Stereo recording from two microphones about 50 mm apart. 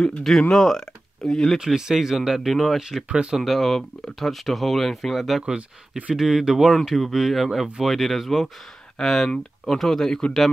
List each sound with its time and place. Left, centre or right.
0.2 s speech: centre
1.6 s speech: centre
3.1 s speech: centre
3.3 s speech: centre
5.4 s speech: right
6.1 s speech: centre
6.7 s speech: centre